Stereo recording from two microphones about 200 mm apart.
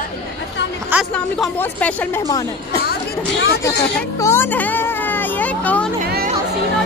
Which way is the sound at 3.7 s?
15° left (ahead or behind).